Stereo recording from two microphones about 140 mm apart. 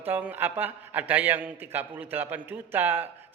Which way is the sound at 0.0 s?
15° right (ahead or behind).